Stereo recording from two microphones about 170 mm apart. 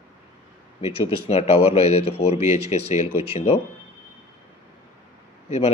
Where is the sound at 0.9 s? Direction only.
35° left (ahead or behind).